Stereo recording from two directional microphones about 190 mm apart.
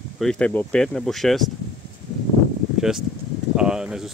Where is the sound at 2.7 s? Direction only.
Centre (ahead or behind).